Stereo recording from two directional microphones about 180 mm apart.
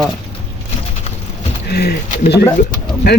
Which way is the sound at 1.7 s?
65° left (ahead or behind).